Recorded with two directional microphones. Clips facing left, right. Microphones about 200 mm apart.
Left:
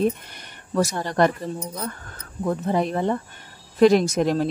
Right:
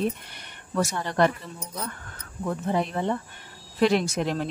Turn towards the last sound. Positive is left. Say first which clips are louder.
# left 6 dB
turn(degrees=40)  # may be behind; listen again after turning